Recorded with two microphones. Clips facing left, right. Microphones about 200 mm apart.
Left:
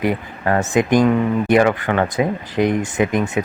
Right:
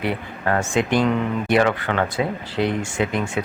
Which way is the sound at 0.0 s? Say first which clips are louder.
Left 4 dB; 10° left (ahead or behind).